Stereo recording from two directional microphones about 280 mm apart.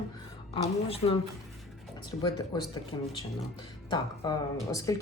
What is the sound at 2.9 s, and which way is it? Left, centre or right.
Speech, centre.